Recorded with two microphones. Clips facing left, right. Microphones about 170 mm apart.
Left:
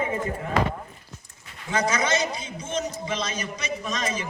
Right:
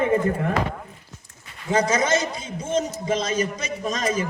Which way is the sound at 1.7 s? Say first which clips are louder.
Right 4 dB; 45° right (ahead or behind).